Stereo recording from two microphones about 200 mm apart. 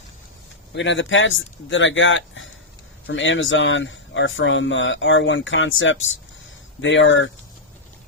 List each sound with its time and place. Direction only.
0.7 s speech: 65° left (ahead or behind)